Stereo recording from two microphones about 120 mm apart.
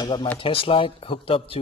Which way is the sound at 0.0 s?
40° left (ahead or behind).